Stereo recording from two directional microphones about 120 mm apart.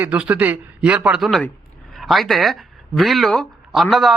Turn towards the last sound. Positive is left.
turn(degrees=0)  # may be behind; listen again after turning